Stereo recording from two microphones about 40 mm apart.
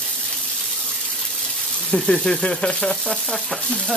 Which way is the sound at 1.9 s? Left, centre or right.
Left.